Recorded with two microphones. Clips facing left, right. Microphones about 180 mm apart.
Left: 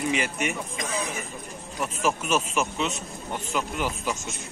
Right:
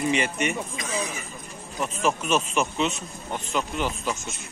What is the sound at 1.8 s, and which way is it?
Speech, 5° left (ahead or behind).